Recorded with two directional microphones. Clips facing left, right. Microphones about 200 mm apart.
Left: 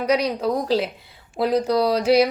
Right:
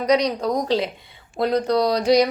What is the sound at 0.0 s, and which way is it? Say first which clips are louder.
Speech: right 1 dB; 5° left (ahead or behind).